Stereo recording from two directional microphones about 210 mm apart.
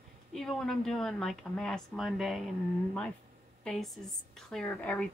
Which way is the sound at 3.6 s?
Centre (ahead or behind).